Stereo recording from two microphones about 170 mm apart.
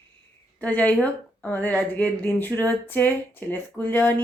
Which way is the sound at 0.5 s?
10° left (ahead or behind).